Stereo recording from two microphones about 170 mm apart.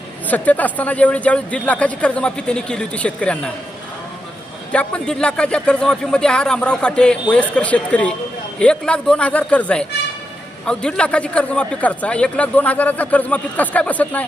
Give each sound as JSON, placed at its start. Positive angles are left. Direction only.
{"t": 0.3, "sound": "speech", "side_deg": 10}
{"t": 4.7, "sound": "a man's voice", "side_deg": 5}